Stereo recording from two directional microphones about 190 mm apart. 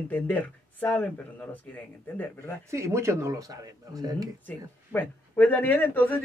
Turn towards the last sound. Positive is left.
turn(degrees=10)  # may be behind; listen again after turning